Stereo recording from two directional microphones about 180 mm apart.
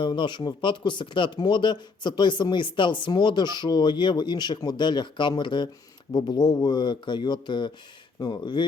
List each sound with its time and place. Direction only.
0.0 s speech: 25° left (ahead or behind)